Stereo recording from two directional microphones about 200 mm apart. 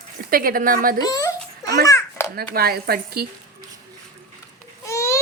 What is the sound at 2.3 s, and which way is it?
Speech, 50° right (ahead or behind).